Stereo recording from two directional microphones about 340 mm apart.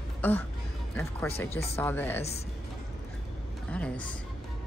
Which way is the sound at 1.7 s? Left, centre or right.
Centre.